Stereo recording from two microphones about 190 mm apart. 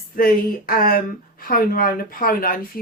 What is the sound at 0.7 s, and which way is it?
Speech, 50° left (ahead or behind).